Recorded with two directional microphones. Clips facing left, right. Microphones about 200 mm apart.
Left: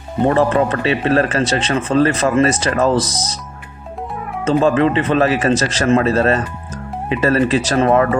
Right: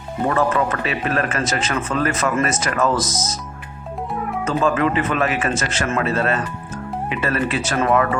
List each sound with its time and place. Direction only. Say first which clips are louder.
0.3 s a man's voice: left 5 dB; 30° left (ahead or behind)
4.4 s a man's voice: left 6 dB; 30° left (ahead or behind)